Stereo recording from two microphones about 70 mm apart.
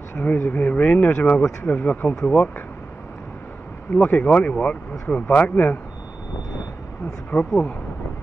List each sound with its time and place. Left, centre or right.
0.1 s speech: left
3.9 s speech: left